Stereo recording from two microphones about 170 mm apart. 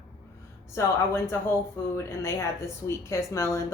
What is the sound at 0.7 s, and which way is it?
A woman's voice, 15° left (ahead or behind).